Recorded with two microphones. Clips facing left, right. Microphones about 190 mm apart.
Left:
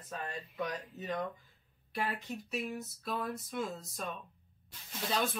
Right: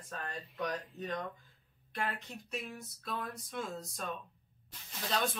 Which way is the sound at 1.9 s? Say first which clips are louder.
Left 2 dB; 5° left (ahead or behind).